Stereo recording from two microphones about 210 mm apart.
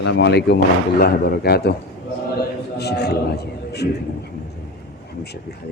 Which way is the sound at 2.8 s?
50° left (ahead or behind).